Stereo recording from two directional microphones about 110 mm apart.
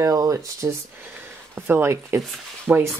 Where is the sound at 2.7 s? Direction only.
10° right (ahead or behind).